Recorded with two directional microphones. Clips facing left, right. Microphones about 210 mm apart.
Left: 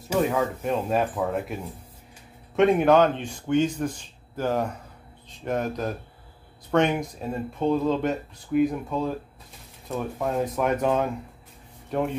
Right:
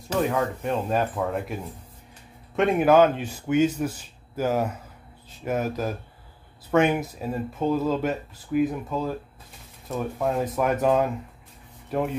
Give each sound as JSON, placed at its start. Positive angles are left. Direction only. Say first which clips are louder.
{"t": 0.1, "sound": "speech", "louder": "left 1 dB", "side_deg": 0}